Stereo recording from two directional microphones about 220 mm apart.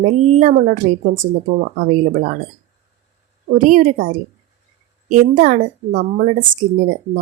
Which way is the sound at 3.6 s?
35° right (ahead or behind).